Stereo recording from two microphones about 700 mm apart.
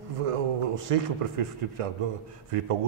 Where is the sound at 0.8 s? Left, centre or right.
Right.